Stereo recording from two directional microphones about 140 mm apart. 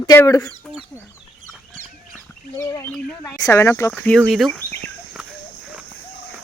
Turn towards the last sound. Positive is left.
turn(degrees=-5)  # may be behind; listen again after turning